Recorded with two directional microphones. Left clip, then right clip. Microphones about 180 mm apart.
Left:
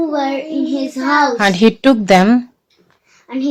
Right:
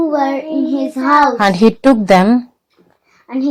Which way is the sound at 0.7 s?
5° right (ahead or behind).